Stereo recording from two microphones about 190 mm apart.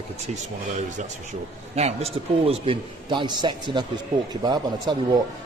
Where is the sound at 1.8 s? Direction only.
35° right (ahead or behind).